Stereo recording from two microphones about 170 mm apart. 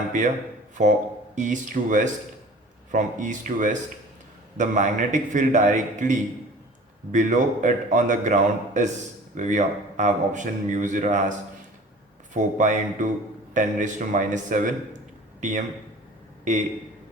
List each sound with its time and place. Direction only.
0.8 s a man's voice: 45° right (ahead or behind)
12.3 s a man's voice: 50° right (ahead or behind)